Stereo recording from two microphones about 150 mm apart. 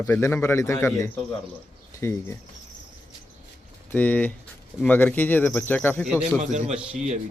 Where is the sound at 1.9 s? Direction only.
15° left (ahead or behind).